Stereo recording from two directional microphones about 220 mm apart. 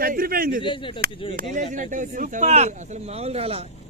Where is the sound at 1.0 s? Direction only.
45° right (ahead or behind); by 3.6 s 25° right (ahead or behind).